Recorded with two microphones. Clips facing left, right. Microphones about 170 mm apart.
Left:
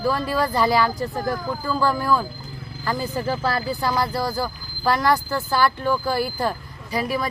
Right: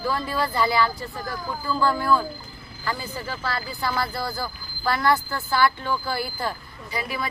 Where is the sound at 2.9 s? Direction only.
40° left (ahead or behind).